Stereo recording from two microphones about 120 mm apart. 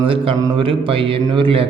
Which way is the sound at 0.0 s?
50° right (ahead or behind).